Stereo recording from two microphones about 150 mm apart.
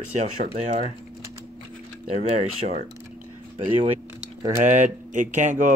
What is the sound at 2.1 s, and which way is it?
Speech, 50° right (ahead or behind).